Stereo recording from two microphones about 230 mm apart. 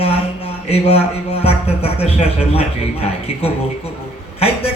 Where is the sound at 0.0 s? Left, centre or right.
Left.